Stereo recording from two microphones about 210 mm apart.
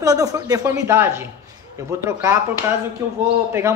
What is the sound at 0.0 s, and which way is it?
A man's voice, 15° right (ahead or behind).